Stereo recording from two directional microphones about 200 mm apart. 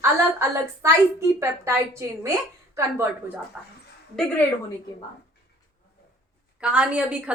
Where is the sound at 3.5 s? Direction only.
Centre (ahead or behind).